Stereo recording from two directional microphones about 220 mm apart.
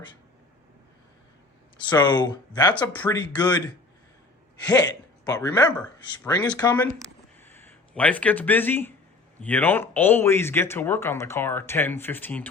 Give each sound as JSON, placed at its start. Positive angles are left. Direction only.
{"t": 1.9, "sound": "speech", "side_deg": 20}
{"t": 2.7, "sound": "speech", "side_deg": 10}
{"t": 4.6, "sound": "speech", "side_deg": 15}